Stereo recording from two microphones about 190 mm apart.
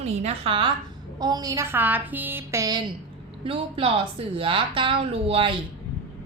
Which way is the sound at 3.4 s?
30° right (ahead or behind).